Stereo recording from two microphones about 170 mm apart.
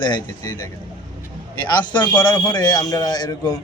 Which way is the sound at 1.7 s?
25° left (ahead or behind).